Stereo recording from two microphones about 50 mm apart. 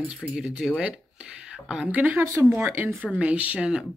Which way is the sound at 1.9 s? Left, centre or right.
Right.